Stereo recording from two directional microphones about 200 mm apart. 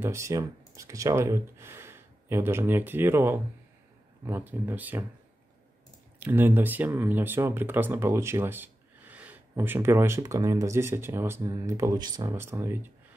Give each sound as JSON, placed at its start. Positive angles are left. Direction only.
{"t": 0.0, "sound": "speech", "side_deg": -15}
{"t": 6.1, "sound": "speech", "side_deg": -10}